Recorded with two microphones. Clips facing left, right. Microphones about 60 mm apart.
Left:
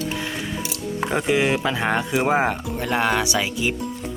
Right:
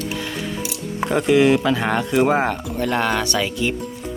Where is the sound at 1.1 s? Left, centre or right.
Centre.